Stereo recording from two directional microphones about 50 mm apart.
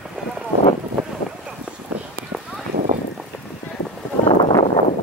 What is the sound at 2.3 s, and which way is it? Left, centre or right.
Clip-clop, centre.